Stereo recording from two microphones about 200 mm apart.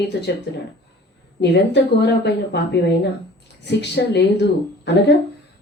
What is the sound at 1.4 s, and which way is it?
Speech, 60° left (ahead or behind).